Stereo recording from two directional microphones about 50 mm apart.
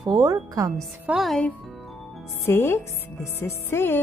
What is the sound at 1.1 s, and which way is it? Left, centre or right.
Speech, right.